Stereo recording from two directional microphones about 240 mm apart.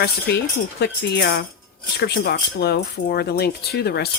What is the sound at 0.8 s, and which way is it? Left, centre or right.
Speech, left.